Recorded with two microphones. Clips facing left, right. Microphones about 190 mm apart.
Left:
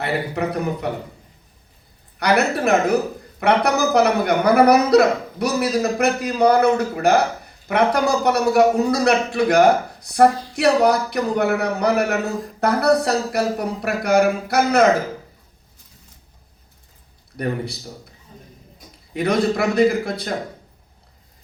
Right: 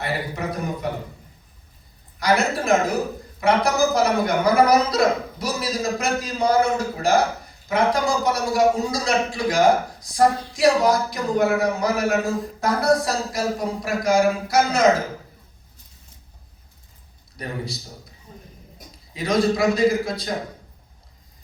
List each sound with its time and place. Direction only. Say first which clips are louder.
0.0 s a man's voice: left 4 dB; 65° left (ahead or behind)
2.1 s a man's voice: left 2 dB; 65° left (ahead or behind)
17.3 s a man's voice: left 6 dB; 60° left (ahead or behind)
19.1 s a man's voice: left 1 dB; 60° left (ahead or behind)